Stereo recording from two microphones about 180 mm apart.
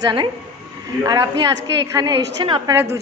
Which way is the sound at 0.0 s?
25° right (ahead or behind).